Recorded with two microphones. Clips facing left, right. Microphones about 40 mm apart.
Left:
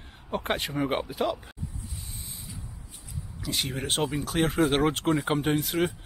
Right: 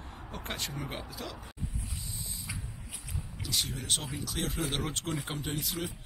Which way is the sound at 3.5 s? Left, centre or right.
Left.